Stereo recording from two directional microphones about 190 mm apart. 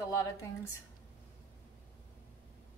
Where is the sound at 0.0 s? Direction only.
20° left (ahead or behind).